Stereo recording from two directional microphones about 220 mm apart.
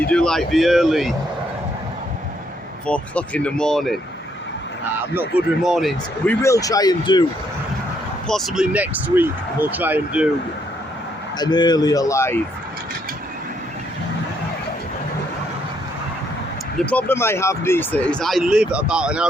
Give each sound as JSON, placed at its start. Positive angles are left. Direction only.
{"t": 0.1, "sound": "speech", "side_deg": 5}
{"t": 2.8, "sound": "speech", "side_deg": 5}
{"t": 5.6, "sound": "speech", "side_deg": 0}
{"t": 6.4, "sound": "speech", "side_deg": 15}
{"t": 8.3, "sound": "speech", "side_deg": 0}
{"t": 11.3, "sound": "speech", "side_deg": 20}
{"t": 16.7, "sound": "speech", "side_deg": 5}